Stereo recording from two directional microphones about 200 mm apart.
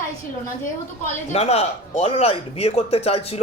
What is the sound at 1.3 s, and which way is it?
Speech, 30° left (ahead or behind).